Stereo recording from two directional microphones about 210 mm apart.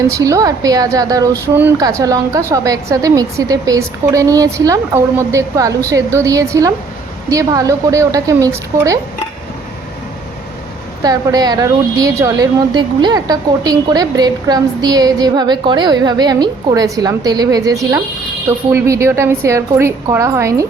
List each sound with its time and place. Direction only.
0.2 s a woman's voice: 15° right (ahead or behind)
11.0 s a woman's voice: 15° right (ahead or behind)